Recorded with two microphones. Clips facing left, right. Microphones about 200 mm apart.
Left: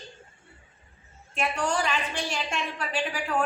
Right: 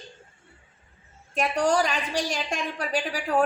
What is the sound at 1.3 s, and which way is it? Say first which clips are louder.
A woman's voice: right 5 dB; 40° right (ahead or behind).